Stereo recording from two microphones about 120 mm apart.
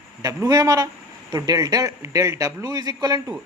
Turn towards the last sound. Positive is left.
turn(degrees=-35)  # may be behind; listen again after turning